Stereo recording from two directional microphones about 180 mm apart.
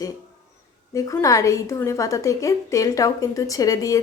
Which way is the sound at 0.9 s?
20° left (ahead or behind).